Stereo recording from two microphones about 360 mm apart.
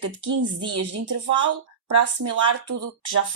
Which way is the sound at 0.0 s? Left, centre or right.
Right.